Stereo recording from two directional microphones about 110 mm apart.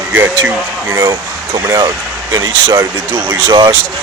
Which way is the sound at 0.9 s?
30° right (ahead or behind).